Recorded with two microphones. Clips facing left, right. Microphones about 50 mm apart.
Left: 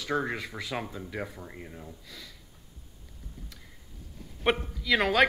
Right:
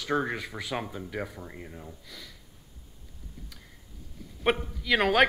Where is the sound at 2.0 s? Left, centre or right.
Right.